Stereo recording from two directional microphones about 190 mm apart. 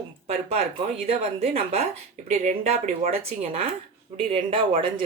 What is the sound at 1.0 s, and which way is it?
Speech, 35° right (ahead or behind).